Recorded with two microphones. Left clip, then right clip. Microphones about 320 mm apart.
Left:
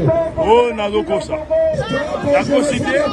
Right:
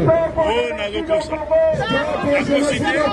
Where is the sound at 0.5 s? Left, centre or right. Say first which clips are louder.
Left 6 dB; centre.